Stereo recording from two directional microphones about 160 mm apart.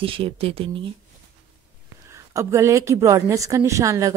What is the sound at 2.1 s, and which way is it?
A woman's voice, 20° right (ahead or behind).